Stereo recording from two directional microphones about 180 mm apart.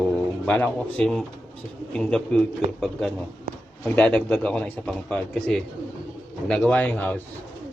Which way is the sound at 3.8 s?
5° left (ahead or behind).